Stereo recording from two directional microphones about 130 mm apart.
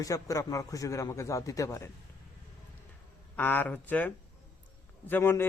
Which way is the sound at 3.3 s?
15° left (ahead or behind).